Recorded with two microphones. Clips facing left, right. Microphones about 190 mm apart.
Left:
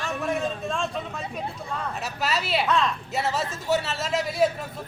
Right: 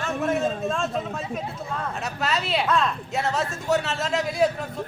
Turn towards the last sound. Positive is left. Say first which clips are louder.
# right 1 dB
turn(degrees=0)  # may be behind; listen again after turning